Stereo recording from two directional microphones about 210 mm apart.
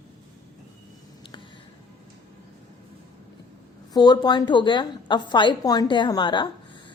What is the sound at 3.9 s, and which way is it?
A woman's voice, 20° left (ahead or behind).